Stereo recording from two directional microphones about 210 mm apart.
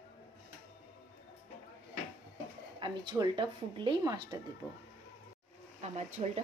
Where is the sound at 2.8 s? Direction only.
20° right (ahead or behind).